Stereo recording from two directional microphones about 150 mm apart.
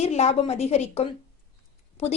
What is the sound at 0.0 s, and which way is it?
A woman's voice, 45° left (ahead or behind).